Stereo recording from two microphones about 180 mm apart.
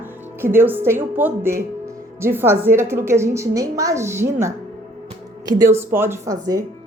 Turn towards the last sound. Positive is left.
turn(degrees=-20)  # may be behind; listen again after turning